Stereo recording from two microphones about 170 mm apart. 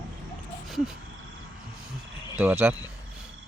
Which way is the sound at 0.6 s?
Centre (ahead or behind).